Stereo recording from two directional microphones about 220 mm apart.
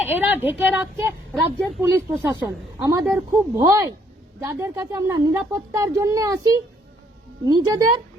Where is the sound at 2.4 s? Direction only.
15° right (ahead or behind).